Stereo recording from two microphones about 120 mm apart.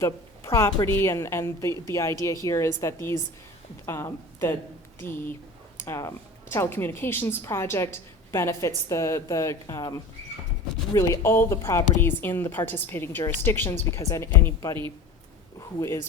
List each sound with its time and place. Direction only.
0.0 s a woman's voice: 25° left (ahead or behind)